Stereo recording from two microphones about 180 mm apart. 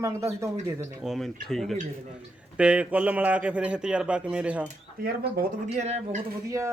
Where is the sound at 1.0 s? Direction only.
Centre (ahead or behind).